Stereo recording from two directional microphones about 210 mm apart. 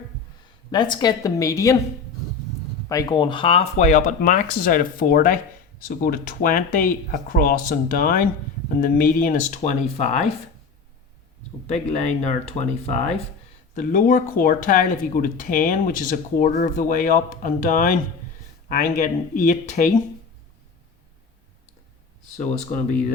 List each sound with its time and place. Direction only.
0.7 s a woman's voice: 20° left (ahead or behind)
2.9 s speech: 20° left (ahead or behind)
11.7 s speech: 30° left (ahead or behind)